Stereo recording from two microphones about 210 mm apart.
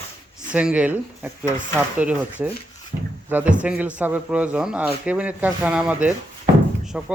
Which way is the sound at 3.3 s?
10° right (ahead or behind).